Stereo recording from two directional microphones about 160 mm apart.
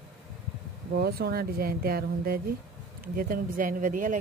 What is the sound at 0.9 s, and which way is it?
Speech, 75° right (ahead or behind).